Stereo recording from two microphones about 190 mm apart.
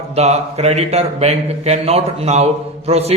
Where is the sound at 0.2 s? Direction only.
35° right (ahead or behind).